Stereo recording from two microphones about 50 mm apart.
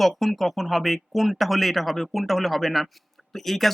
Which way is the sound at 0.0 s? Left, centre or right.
Centre.